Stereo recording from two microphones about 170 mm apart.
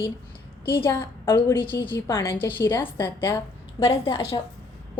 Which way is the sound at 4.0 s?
35° left (ahead or behind).